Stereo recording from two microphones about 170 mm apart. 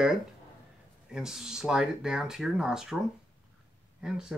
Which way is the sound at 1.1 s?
5° right (ahead or behind).